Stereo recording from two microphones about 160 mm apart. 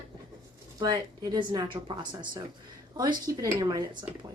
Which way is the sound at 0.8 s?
25° right (ahead or behind).